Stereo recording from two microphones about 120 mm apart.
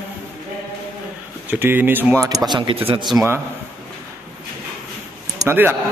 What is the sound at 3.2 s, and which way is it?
Speech, 20° right (ahead or behind).